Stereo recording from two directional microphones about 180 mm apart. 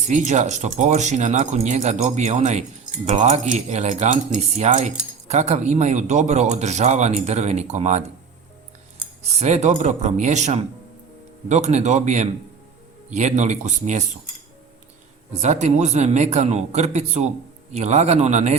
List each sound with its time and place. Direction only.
0.1 s a man's voice: 40° right (ahead or behind)
9.4 s a man's voice: 40° right (ahead or behind)
15.3 s a man's voice: 40° right (ahead or behind)